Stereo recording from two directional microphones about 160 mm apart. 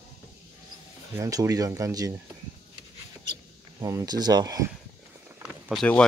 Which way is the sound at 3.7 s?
20° right (ahead or behind).